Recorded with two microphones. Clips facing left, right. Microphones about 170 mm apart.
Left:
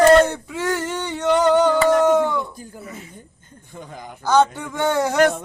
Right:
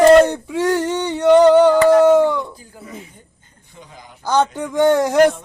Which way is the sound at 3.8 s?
50° left (ahead or behind).